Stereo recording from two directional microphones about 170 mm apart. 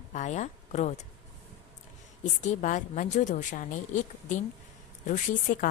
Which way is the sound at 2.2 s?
45° left (ahead or behind).